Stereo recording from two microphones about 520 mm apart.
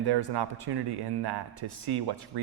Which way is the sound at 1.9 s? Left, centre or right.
Right.